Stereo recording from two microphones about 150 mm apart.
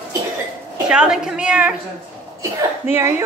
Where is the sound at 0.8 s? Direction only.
5° right (ahead or behind).